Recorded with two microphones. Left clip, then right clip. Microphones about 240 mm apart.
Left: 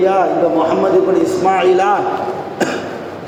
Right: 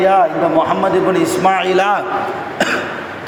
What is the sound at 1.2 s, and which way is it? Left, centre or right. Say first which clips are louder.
Speech: left 1 dB; right.